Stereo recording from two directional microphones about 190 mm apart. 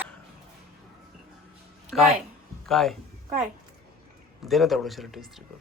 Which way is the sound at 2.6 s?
Centre (ahead or behind).